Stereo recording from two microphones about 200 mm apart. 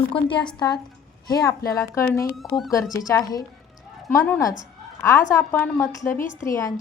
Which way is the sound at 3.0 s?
15° left (ahead or behind).